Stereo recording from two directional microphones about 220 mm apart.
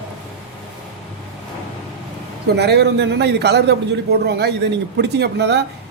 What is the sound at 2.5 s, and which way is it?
A man's voice, 50° right (ahead or behind).